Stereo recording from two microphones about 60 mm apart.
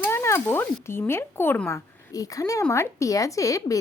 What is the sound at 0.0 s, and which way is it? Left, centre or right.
Cat, left.